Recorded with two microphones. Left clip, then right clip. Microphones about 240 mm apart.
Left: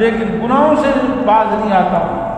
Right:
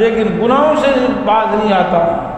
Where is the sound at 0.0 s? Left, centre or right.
Right.